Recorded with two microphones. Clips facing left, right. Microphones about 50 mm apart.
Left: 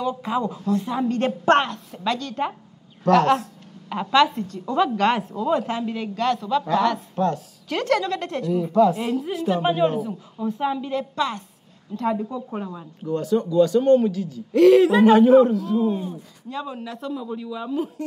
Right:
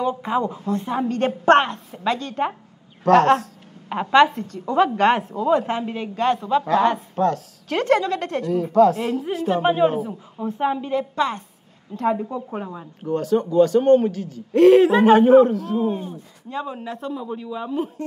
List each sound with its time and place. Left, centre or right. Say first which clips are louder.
0.0 s a woman's voice: right 2 dB; right
9.0 s a woman's voice: right 1 dB; centre
12.3 s a woman's voice: right 2 dB; right
13.0 s a man's voice: right 2 dB; right
14.5 s a woman's voice: right 1 dB; right